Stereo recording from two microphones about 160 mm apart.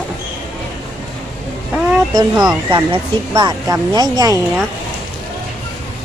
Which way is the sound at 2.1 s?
25° right (ahead or behind).